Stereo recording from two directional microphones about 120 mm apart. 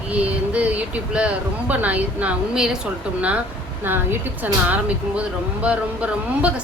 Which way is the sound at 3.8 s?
15° right (ahead or behind).